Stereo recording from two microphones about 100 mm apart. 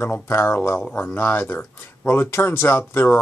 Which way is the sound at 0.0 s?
25° left (ahead or behind).